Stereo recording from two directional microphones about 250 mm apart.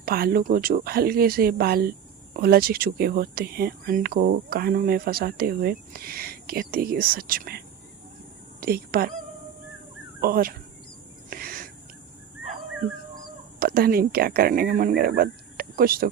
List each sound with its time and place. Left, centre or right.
0.0 s speech: right
8.6 s speech: right
10.2 s speech: right
11.3 s a sound: right
13.6 s speech: right